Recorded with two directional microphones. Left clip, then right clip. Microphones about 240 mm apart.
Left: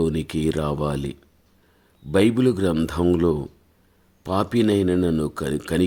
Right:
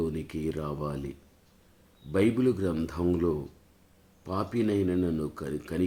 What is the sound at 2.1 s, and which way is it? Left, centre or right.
Speech, left.